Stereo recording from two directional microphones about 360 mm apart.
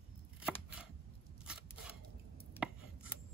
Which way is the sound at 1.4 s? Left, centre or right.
Centre.